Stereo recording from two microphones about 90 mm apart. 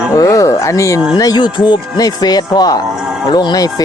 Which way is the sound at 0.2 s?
40° left (ahead or behind).